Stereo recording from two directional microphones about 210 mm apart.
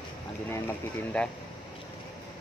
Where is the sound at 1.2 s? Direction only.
5° left (ahead or behind).